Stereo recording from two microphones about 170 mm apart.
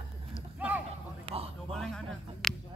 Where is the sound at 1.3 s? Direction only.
35° right (ahead or behind).